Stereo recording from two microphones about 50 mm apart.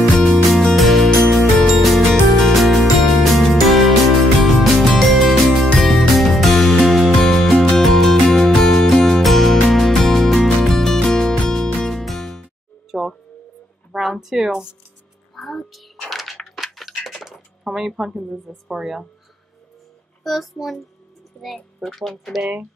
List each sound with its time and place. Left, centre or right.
0.7 s music: centre
7.2 s music: centre
11.9 s music: centre
12.9 s music: centre
13.9 s a sound: centre
15.3 s a child's voice: centre
16.1 s a sound: centre
20.2 s a child's voice: centre
21.8 s a child's voice: centre